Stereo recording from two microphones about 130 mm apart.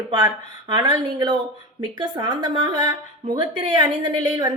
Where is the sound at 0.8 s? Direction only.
30° right (ahead or behind).